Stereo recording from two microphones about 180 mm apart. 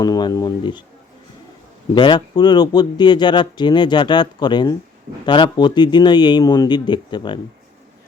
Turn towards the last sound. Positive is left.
turn(degrees=25)  # may be behind; listen again after turning